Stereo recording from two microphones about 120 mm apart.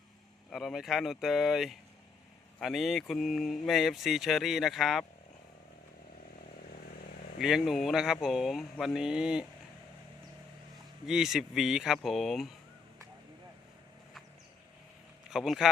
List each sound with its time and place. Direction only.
0.5 s speech: centre (ahead or behind)
7.3 s speech: 5° right (ahead or behind)
11.0 s speech: 5° right (ahead or behind)
15.3 s speech: 5° right (ahead or behind)